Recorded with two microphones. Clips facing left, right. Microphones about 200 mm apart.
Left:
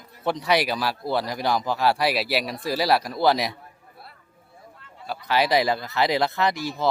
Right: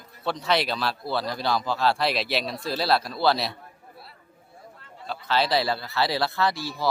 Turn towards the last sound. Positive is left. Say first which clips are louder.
# left 2 dB
turn(degrees=20)  # may be behind; listen again after turning